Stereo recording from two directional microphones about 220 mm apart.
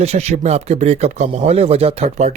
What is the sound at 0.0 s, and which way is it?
Speech, 30° right (ahead or behind).